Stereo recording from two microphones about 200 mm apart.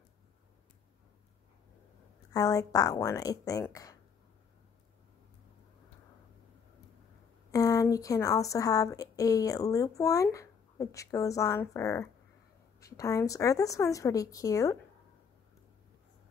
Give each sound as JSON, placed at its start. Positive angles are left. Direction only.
{"t": 2.3, "sound": "a woman's voice", "side_deg": 15}
{"t": 7.5, "sound": "a woman's voice", "side_deg": 15}